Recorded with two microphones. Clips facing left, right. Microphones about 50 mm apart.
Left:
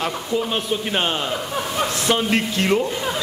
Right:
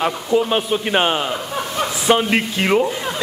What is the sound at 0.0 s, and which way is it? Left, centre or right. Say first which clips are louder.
Speech: right 5 dB; centre.